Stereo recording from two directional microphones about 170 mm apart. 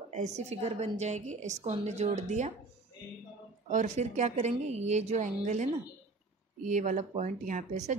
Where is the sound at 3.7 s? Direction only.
45° right (ahead or behind).